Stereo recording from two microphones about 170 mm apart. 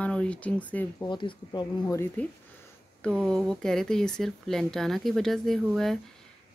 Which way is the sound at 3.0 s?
5° left (ahead or behind).